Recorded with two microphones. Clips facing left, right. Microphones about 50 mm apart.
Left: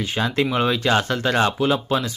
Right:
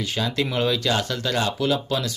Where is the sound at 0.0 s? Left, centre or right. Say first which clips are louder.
Left 3 dB; left.